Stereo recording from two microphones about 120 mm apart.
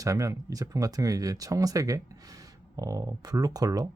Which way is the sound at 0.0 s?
25° right (ahead or behind).